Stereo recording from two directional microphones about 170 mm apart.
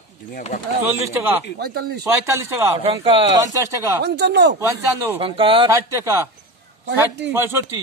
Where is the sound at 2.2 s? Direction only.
15° right (ahead or behind).